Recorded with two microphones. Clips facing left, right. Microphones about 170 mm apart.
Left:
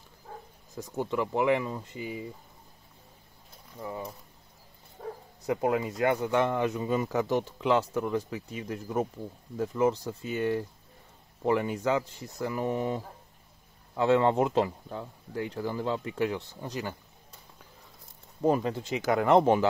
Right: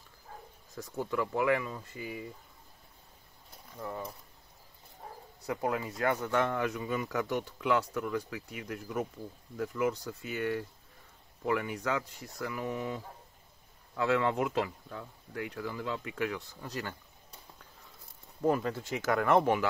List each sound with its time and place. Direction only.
0.7 s speech: 20° left (ahead or behind)
3.7 s speech: 10° left (ahead or behind)
5.0 s bow-wow: 75° left (ahead or behind)
5.5 s speech: 20° left (ahead or behind)
18.4 s speech: 20° left (ahead or behind)